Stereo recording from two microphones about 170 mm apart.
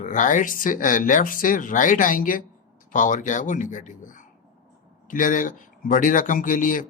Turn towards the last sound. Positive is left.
turn(degrees=50)  # may be behind; listen again after turning